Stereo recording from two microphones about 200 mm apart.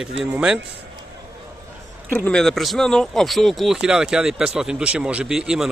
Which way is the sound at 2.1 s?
5° left (ahead or behind).